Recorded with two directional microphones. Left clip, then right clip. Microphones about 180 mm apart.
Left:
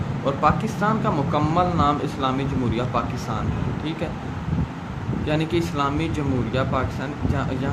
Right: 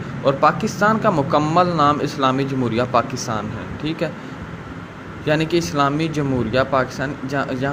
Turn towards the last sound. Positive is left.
turn(degrees=-35)  # may be behind; listen again after turning